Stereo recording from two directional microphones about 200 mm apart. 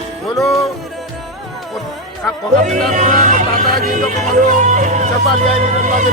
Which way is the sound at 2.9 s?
35° right (ahead or behind).